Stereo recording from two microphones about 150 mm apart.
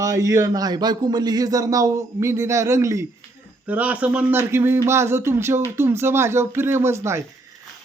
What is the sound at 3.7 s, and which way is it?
Speech, 10° right (ahead or behind).